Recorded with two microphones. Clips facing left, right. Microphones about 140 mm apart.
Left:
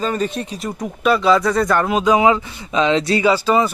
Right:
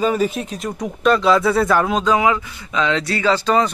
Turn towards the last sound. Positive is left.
turn(degrees=5)  # may be behind; listen again after turning